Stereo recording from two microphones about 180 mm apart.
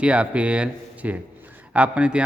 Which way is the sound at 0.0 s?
5° right (ahead or behind).